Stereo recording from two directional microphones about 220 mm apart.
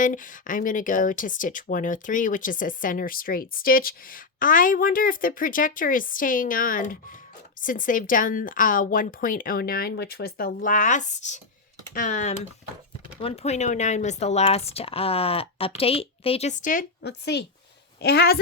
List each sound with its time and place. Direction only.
0.0 s a woman's voice: 35° left (ahead or behind)